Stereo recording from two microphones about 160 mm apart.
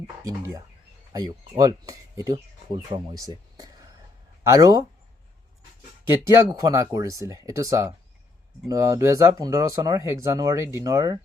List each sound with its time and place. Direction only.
0.3 s speech: 20° right (ahead or behind)
6.2 s speech: 20° right (ahead or behind)